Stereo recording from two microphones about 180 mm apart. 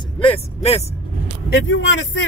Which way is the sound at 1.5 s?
85° left.